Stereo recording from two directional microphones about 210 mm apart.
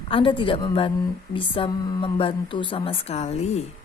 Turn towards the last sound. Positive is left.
turn(degrees=30)  # may be behind; listen again after turning